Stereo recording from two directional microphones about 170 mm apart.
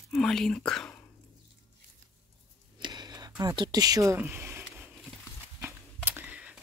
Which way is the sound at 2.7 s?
25° right (ahead or behind).